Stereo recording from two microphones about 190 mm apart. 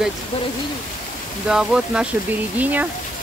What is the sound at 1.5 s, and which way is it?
Speech, 5° right (ahead or behind).